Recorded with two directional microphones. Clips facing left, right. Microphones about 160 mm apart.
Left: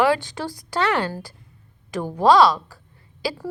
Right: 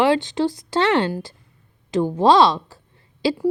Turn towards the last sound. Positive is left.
turn(degrees=-25)  # may be behind; listen again after turning